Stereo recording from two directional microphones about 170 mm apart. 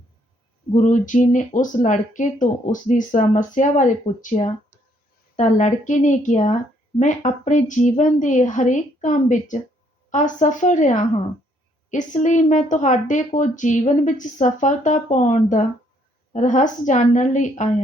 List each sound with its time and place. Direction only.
0.7 s a woman's voice: 45° left (ahead or behind)